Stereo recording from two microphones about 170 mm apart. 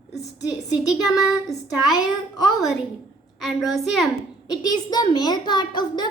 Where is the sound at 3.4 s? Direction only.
Centre (ahead or behind).